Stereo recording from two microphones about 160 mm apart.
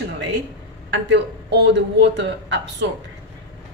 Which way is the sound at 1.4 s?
90° right.